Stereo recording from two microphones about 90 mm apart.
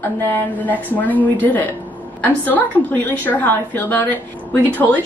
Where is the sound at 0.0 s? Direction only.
20° left (ahead or behind).